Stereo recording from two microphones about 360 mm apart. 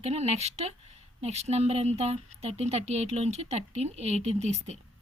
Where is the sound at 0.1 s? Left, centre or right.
Centre.